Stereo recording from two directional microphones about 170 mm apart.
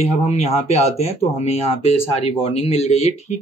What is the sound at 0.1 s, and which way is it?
Speech, 40° left (ahead or behind).